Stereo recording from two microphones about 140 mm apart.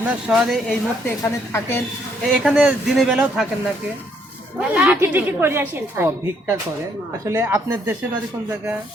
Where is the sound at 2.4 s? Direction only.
5° right (ahead or behind).